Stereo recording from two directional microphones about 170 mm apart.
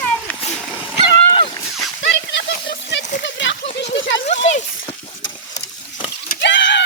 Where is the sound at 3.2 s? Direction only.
90° left.